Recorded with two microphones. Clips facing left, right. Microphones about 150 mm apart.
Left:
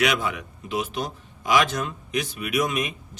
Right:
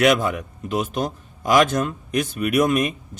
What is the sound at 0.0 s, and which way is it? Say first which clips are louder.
Speech: right 6 dB; 45° right (ahead or behind).